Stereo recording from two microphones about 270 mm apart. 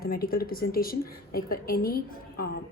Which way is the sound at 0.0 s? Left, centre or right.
Left.